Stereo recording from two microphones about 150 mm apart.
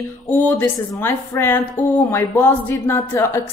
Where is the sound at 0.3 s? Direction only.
15° left (ahead or behind).